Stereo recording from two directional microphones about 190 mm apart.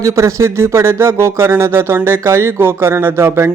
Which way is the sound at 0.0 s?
15° right (ahead or behind).